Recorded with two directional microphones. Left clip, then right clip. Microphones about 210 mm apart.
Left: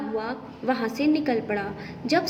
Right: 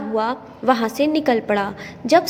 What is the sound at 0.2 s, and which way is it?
A woman's voice, 40° right (ahead or behind).